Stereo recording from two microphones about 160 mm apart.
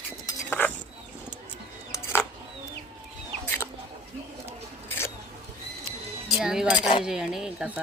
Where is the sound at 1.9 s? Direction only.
15° left (ahead or behind).